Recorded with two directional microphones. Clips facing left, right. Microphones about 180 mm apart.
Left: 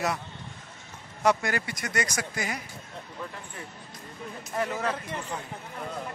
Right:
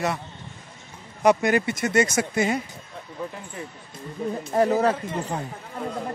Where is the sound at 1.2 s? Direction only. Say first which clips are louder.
Right 6 dB; 20° right (ahead or behind).